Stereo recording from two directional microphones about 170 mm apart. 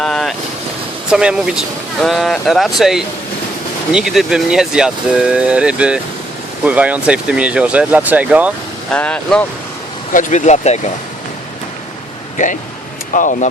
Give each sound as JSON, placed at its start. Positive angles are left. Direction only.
{"t": 0.0, "sound": "boat", "side_deg": 0}
{"t": 1.1, "sound": "speech", "side_deg": -5}
{"t": 8.9, "sound": "speech", "side_deg": 5}
{"t": 10.1, "sound": "speech", "side_deg": 50}
{"t": 13.1, "sound": "speech", "side_deg": 50}